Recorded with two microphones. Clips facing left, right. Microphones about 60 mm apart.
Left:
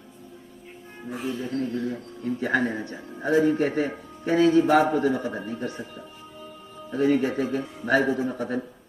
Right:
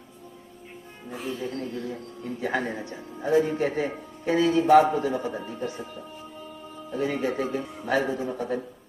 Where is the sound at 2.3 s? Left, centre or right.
Left.